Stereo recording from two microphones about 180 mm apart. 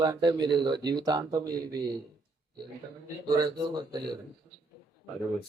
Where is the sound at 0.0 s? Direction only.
20° right (ahead or behind).